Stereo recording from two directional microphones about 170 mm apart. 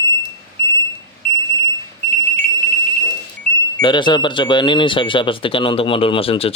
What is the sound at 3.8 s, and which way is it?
Speech, 25° left (ahead or behind).